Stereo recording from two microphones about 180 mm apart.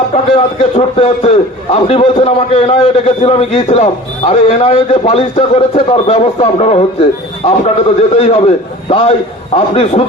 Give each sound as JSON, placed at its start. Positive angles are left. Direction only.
{"t": 0.1, "sound": "a man's voice", "side_deg": 35}